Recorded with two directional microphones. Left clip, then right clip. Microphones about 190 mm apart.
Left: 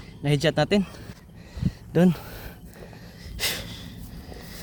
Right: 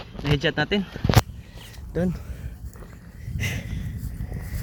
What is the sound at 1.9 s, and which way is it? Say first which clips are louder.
Speech: left 5 dB; 40° left (ahead or behind).